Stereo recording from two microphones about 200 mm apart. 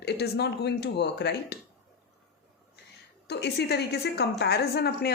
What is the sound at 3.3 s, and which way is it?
A woman's voice, 55° left (ahead or behind).